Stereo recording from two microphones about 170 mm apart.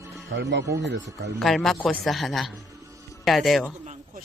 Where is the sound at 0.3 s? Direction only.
90° right.